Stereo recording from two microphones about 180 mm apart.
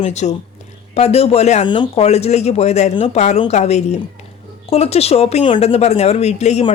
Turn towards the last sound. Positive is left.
turn(degrees=35)  # may be behind; listen again after turning